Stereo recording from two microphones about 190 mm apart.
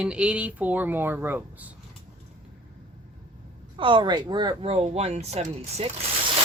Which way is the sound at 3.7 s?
25° right (ahead or behind).